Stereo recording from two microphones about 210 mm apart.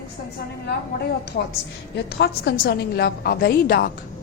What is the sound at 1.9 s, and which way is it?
A woman's voice, 55° left (ahead or behind).